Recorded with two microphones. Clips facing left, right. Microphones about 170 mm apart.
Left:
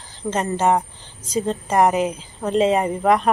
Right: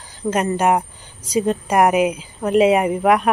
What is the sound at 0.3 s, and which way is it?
Speech, 15° right (ahead or behind).